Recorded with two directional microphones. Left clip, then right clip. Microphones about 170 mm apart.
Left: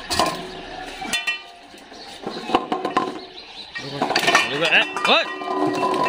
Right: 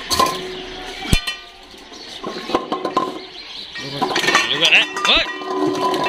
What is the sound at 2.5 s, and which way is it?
Music, 10° left (ahead or behind).